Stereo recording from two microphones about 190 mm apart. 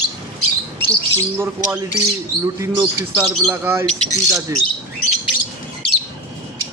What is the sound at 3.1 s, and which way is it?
Speech, 15° right (ahead or behind).